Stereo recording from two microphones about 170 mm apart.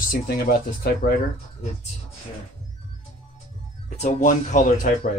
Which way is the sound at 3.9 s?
40° left (ahead or behind).